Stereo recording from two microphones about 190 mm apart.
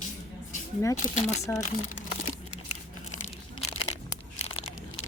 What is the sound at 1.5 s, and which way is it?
Speech, 15° left (ahead or behind).